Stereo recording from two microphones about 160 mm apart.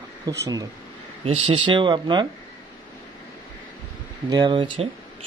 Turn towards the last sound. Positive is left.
turn(degrees=-30)  # may be behind; listen again after turning